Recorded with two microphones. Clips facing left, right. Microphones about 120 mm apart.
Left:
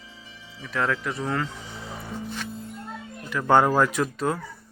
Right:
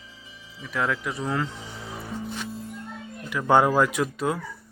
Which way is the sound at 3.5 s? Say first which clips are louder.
Even; 10° right (ahead or behind).